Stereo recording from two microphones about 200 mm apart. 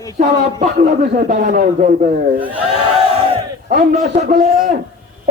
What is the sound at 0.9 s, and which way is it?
A man's voice, 50° right (ahead or behind).